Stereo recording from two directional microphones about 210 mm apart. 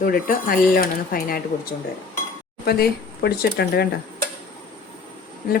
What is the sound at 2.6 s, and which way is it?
Speech, 50° left (ahead or behind).